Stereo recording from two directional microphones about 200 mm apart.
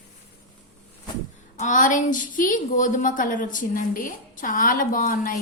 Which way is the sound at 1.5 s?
40° left (ahead or behind).